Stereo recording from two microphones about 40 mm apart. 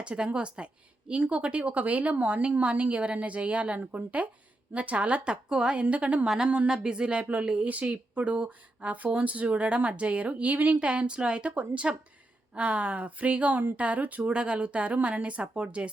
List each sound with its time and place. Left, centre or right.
0.0 s a woman's voice: right
6.2 s a woman's voice: centre; by 10.8 s right
10.8 s a woman's voice: right
14.3 s a woman's voice: right